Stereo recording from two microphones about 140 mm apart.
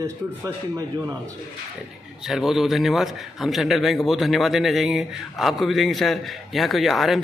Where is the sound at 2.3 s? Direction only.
Centre (ahead or behind).